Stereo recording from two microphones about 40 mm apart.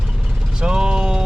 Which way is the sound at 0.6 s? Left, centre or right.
Right.